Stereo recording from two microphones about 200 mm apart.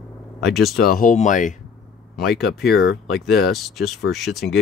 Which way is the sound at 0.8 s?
45° left (ahead or behind).